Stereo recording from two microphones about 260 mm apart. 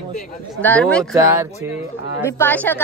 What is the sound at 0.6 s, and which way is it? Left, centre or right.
Speech, centre.